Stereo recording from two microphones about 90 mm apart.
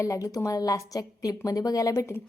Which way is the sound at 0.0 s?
40° left (ahead or behind).